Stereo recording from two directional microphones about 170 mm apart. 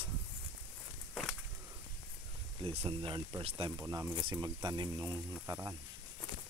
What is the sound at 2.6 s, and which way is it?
Speech, 35° right (ahead or behind).